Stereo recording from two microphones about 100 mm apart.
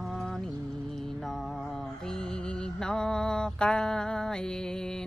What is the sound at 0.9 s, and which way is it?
Music, centre (ahead or behind).